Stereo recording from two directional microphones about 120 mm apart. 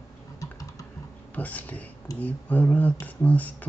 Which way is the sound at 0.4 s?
30° left (ahead or behind).